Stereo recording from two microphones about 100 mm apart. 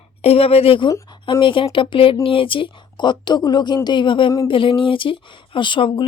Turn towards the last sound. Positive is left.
turn(degrees=55)  # may be behind; listen again after turning